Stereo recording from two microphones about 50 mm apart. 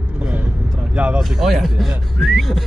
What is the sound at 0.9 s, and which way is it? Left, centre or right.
Speech, right.